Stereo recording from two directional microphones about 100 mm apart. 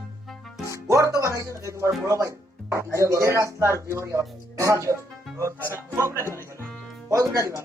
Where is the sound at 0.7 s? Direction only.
30° right (ahead or behind).